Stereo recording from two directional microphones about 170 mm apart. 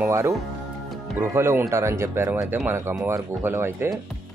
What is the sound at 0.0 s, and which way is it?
Speech, 15° right (ahead or behind).